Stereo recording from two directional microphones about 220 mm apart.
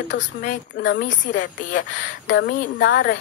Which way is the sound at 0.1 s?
55° left (ahead or behind).